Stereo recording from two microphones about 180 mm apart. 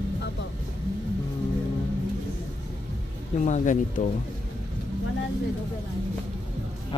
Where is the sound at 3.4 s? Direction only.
45° left (ahead or behind).